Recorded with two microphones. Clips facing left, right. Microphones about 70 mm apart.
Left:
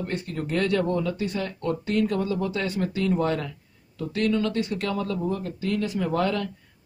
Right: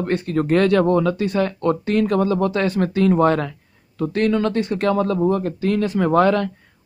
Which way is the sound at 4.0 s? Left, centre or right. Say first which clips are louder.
Right 6 dB; right.